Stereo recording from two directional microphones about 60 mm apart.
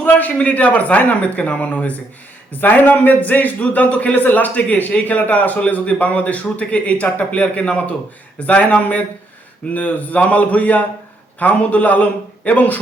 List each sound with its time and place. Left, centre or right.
0.0 s a man's voice: left